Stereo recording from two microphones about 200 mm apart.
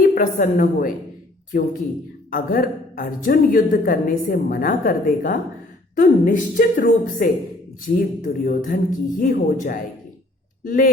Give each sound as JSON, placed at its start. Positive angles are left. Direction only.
{"t": 0.1, "sound": "speech", "side_deg": 40}
{"t": 2.3, "sound": "a woman's voice", "side_deg": 45}